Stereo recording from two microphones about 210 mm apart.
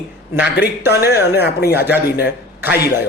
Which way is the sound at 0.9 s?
50° left (ahead or behind).